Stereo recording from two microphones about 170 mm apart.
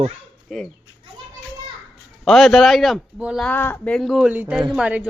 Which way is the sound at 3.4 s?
10° left (ahead or behind).